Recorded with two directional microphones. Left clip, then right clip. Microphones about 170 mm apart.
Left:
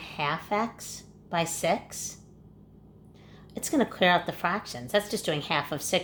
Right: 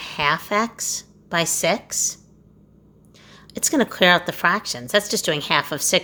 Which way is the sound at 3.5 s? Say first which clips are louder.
Right 6 dB; 35° right (ahead or behind).